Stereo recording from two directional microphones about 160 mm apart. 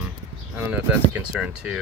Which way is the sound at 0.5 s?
10° right (ahead or behind).